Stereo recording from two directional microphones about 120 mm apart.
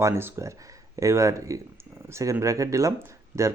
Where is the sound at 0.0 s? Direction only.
20° right (ahead or behind).